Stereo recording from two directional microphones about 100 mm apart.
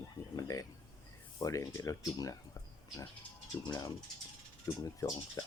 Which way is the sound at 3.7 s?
40° left (ahead or behind).